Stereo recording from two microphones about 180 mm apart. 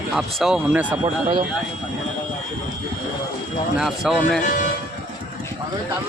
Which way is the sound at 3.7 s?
Centre (ahead or behind).